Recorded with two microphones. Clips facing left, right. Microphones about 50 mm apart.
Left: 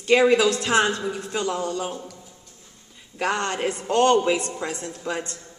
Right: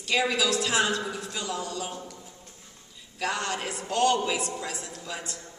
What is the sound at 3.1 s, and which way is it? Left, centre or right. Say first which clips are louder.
A woman's voice: left 5 dB; left.